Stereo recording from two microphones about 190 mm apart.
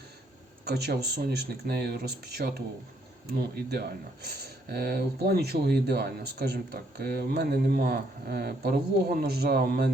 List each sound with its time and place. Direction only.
0.6 s speech: 55° right (ahead or behind)